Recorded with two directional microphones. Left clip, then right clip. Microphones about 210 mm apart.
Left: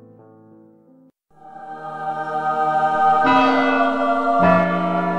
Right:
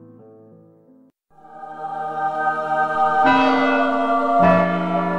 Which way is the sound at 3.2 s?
Centre (ahead or behind).